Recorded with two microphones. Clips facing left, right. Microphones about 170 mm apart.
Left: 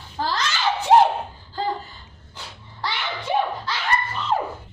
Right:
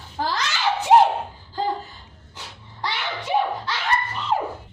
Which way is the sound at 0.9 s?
10° right (ahead or behind).